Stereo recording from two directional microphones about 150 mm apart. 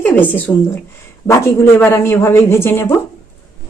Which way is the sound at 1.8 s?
15° left (ahead or behind).